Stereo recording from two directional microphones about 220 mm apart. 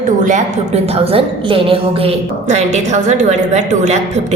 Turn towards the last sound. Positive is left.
turn(degrees=-30)  # may be behind; listen again after turning